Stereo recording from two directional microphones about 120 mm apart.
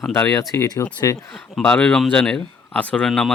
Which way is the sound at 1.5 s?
10° left (ahead or behind).